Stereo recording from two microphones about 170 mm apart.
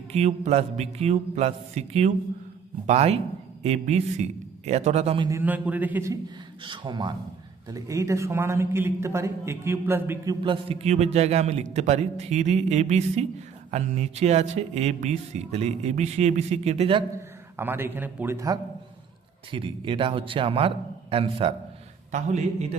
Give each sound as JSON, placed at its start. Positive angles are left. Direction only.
{"t": 0.1, "sound": "speech", "side_deg": -40}
{"t": 5.3, "sound": "a man's voice", "side_deg": -10}
{"t": 6.6, "sound": "a man's voice", "side_deg": -25}
{"t": 10.4, "sound": "speech", "side_deg": -30}
{"t": 17.2, "sound": "a man's voice", "side_deg": -15}
{"t": 19.5, "sound": "speech", "side_deg": -30}